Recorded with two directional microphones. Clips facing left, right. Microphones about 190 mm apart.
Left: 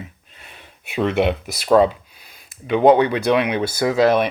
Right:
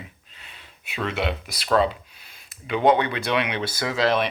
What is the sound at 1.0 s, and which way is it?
Speech, 55° left (ahead or behind).